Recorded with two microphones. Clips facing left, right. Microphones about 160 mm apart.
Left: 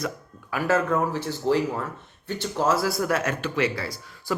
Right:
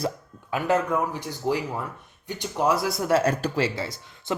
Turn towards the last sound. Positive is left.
turn(degrees=-20)  # may be behind; listen again after turning